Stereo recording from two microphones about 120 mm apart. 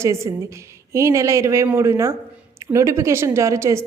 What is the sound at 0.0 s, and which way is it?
A woman's voice, 25° right (ahead or behind).